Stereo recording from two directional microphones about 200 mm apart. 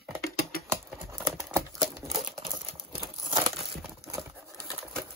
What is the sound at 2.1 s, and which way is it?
Typewriter, 25° right (ahead or behind).